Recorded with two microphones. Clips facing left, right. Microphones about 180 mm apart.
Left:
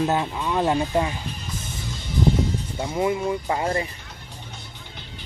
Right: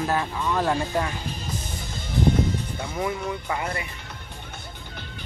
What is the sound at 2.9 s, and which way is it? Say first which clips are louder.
Speech: left 5 dB; 25° left (ahead or behind).